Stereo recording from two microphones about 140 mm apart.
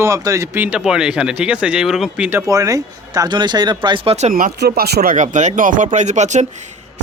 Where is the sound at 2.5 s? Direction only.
25° right (ahead or behind).